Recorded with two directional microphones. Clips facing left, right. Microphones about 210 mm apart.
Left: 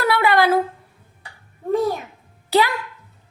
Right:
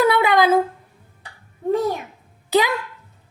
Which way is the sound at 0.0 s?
20° right (ahead or behind).